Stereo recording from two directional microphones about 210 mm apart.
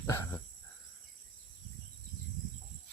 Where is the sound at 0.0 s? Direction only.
15° left (ahead or behind).